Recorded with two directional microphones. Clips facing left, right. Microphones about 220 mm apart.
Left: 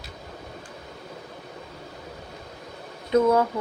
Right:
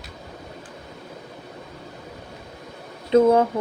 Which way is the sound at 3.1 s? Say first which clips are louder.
Right 4 dB; 25° right (ahead or behind).